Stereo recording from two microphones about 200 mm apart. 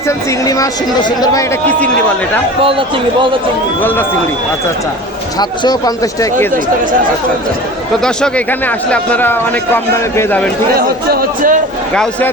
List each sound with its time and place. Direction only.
0.4 s speech: 15° left (ahead or behind)
2.6 s speech: 25° right (ahead or behind)
5.4 s speech: 20° left (ahead or behind)
8.0 s speech: 5° left (ahead or behind)
10.8 s a man's voice: 50° right (ahead or behind)